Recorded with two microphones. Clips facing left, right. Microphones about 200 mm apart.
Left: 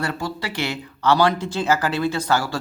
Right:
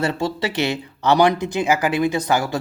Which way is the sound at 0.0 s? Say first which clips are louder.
Right 5 dB; 25° right (ahead or behind).